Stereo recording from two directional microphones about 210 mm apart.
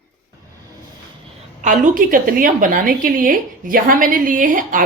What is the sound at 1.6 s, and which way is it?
Speech, 40° right (ahead or behind).